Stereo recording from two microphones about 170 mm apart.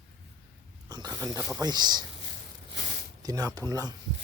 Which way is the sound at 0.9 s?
25° right (ahead or behind).